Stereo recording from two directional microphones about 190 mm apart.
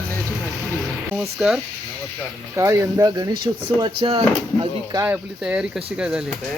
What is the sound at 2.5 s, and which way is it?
Speech, 15° right (ahead or behind).